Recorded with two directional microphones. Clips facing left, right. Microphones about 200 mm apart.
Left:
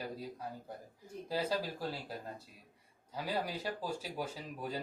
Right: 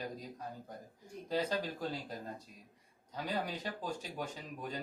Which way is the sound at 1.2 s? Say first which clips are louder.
Even; 5° left (ahead or behind).